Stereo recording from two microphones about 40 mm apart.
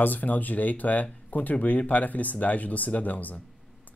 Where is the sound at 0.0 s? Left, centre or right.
Left.